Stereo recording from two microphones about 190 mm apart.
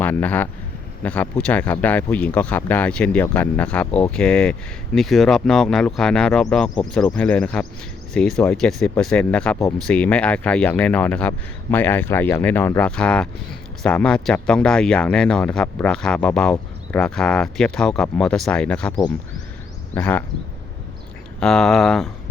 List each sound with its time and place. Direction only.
0.0 s speech: 10° left (ahead or behind)
21.4 s speech: 5° left (ahead or behind)